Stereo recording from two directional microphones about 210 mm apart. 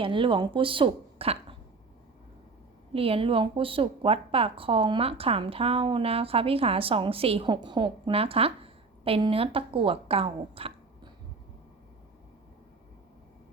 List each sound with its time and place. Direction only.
0.0 s a woman's voice: 25° right (ahead or behind)
2.9 s a woman's voice: 25° right (ahead or behind)